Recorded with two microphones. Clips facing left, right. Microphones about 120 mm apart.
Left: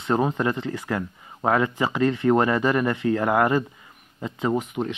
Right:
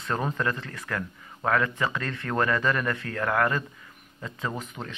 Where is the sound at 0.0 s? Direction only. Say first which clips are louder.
Left 6 dB; 25° left (ahead or behind).